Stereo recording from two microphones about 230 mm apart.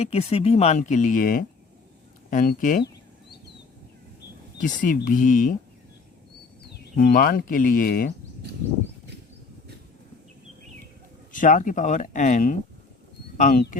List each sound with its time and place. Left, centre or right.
0.0 s speech: left
4.6 s speech: left
6.6 s speech: left
11.3 s speech: left